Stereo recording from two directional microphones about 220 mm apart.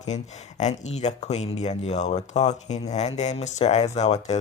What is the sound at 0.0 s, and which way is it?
Speech, 30° left (ahead or behind).